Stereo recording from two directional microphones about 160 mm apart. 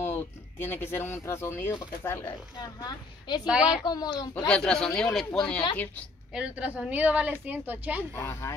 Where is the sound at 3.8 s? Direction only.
25° left (ahead or behind).